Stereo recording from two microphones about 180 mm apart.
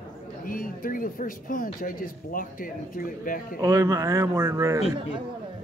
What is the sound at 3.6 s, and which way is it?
Speech, 15° right (ahead or behind).